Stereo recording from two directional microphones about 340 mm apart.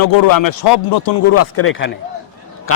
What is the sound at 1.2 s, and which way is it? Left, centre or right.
Speech, left.